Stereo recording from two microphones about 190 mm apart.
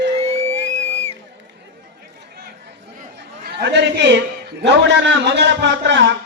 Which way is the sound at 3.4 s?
60° right (ahead or behind).